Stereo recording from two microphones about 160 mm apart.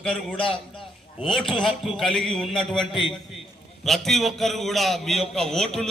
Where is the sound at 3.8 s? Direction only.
Centre (ahead or behind).